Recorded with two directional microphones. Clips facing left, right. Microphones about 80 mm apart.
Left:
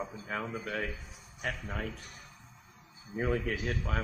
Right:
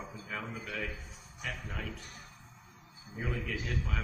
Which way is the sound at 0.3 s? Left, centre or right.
Left.